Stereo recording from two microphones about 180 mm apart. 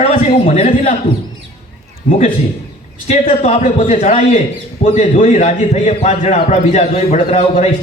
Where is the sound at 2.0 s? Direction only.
40° left (ahead or behind).